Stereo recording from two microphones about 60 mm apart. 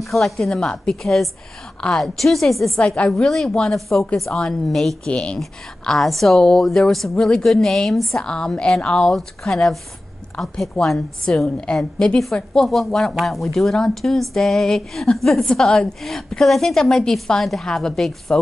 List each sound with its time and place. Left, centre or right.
0.0 s a woman's voice: centre
5.0 s speech: centre
5.4 s a woman's voice: centre
12.6 s a woman's voice: centre